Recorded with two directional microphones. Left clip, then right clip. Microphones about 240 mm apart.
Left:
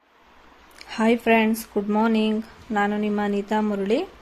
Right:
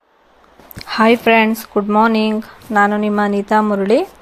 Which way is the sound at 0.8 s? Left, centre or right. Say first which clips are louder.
Right 9 dB; centre.